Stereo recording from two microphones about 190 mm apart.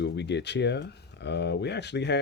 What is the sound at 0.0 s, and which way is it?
Speech, 65° left (ahead or behind).